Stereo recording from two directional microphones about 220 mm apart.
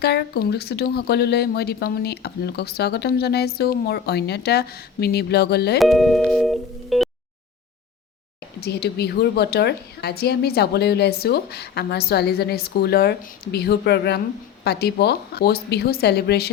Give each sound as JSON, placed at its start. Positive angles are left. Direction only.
{"t": 0.0, "sound": "speech", "side_deg": 45}
{"t": 5.8, "sound": "music", "side_deg": 0}
{"t": 8.6, "sound": "speech", "side_deg": 45}